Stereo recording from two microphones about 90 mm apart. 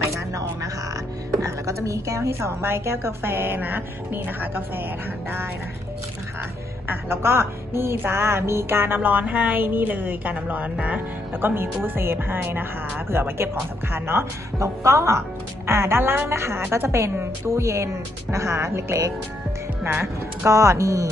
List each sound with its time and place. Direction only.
0.1 s a sound: 35° right (ahead or behind)
1.4 s a woman's voice: 35° right (ahead or behind)
6.9 s a woman's voice: 25° right (ahead or behind)